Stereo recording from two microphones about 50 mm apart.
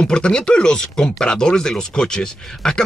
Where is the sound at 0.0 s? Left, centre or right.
Centre.